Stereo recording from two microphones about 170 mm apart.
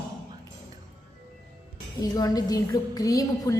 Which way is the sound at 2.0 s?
20° left (ahead or behind).